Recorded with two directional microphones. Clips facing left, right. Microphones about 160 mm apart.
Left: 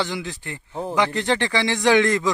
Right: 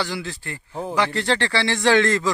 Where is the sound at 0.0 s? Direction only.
20° left (ahead or behind).